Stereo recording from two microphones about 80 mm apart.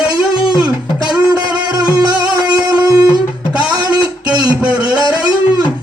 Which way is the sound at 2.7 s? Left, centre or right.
Right.